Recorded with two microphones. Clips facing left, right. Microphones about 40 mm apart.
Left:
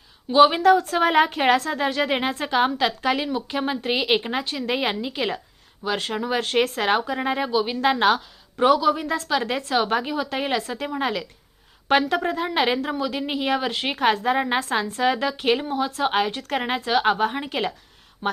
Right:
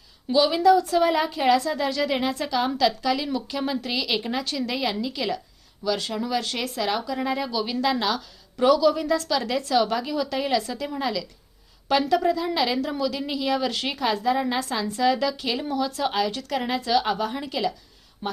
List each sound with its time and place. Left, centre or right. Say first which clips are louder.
0.3 s a woman's voice: left 3 dB; left
7.9 s a woman's voice: left 7 dB; left